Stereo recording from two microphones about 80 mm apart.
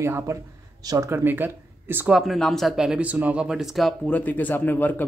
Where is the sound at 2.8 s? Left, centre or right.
Centre.